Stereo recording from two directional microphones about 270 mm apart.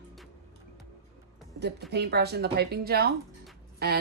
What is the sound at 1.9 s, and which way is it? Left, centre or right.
Speech, right.